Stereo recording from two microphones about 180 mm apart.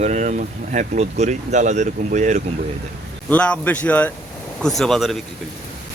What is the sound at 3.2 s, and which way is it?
Speech, 5° left (ahead or behind).